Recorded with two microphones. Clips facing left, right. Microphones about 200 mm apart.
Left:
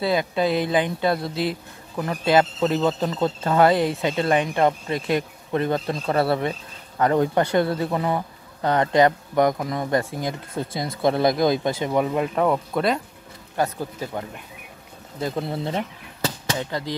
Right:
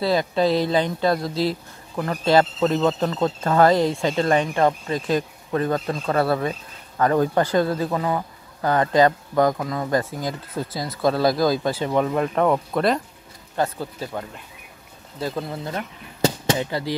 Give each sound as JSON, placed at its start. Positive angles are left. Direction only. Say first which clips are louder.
{"t": 0.7, "sound": "speech", "louder": "right 1 dB", "side_deg": 15}
{"t": 1.3, "sound": "speech", "louder": "right 2 dB", "side_deg": 55}
{"t": 2.0, "sound": "speech", "louder": "right 1 dB", "side_deg": 15}
{"t": 4.0, "sound": "speech", "louder": "right 1 dB", "side_deg": 20}
{"t": 11.8, "sound": "speech", "louder": "right 1 dB", "side_deg": 10}
{"t": 13.6, "sound": "speech", "louder": "even", "side_deg": 15}
{"t": 16.5, "sound": "speech", "louder": "right 2 dB", "side_deg": -10}